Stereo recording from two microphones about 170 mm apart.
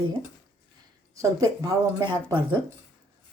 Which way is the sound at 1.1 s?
20° right (ahead or behind).